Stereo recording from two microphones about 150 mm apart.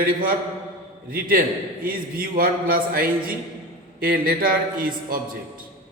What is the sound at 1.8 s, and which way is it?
A man's voice, 70° right (ahead or behind).